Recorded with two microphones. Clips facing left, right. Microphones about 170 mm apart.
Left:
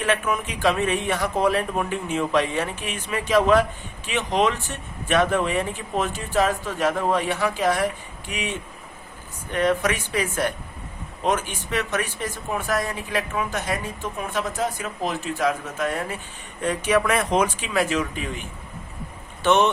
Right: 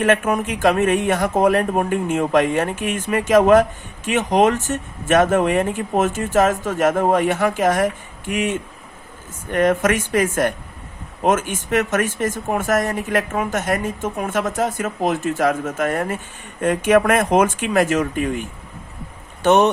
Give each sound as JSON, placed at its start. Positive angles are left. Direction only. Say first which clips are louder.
{"t": 0.0, "sound": "speech", "louder": "right 6 dB", "side_deg": -45}